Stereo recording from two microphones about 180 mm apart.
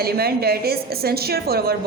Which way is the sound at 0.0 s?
60° right (ahead or behind).